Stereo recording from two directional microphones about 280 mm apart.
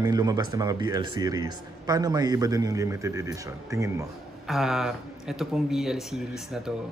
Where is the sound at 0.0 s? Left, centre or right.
Centre.